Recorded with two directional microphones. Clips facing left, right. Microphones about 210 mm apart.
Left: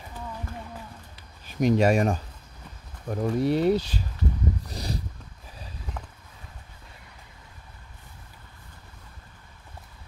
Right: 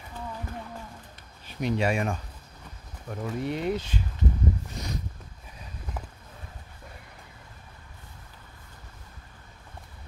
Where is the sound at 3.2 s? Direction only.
35° left (ahead or behind).